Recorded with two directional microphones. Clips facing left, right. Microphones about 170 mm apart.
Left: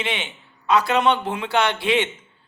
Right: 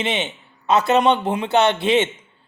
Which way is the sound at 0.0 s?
20° right (ahead or behind).